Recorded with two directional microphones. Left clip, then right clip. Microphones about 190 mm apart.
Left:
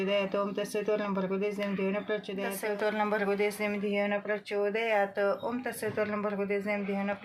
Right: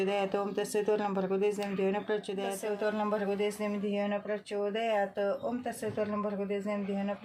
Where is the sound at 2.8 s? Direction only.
15° left (ahead or behind).